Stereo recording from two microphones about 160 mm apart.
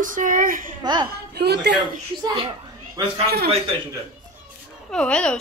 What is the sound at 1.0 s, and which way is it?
Speech, 90° right.